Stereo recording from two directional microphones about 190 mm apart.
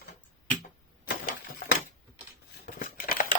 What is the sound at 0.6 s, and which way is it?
Tick-tock, 50° left (ahead or behind).